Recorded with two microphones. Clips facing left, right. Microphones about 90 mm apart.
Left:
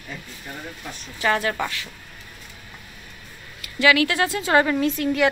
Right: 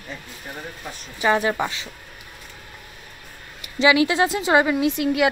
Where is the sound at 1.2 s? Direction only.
15° right (ahead or behind).